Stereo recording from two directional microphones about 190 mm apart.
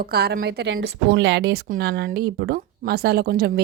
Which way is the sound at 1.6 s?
50° right (ahead or behind).